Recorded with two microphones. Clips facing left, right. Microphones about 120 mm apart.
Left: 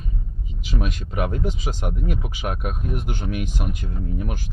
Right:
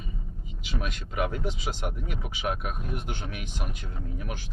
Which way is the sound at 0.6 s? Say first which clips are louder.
Left 6 dB; 40° left (ahead or behind).